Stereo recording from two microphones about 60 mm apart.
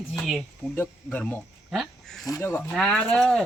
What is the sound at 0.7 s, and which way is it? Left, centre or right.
Speech, left.